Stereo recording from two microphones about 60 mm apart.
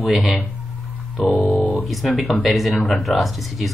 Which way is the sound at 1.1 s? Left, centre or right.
Left.